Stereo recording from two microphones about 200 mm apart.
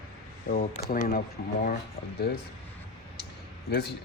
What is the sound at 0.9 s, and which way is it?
Speech, 45° left (ahead or behind).